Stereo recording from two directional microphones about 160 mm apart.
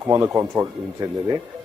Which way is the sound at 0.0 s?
15° right (ahead or behind).